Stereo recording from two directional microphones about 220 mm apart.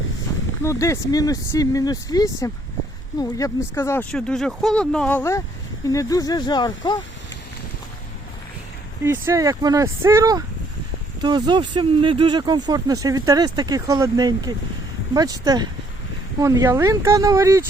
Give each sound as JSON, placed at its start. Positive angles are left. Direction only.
{"t": 0.6, "sound": "speech", "side_deg": 15}
{"t": 9.0, "sound": "speech", "side_deg": -15}